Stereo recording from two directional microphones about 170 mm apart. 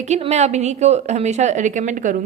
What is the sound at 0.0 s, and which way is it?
A woman's voice, 40° right (ahead or behind).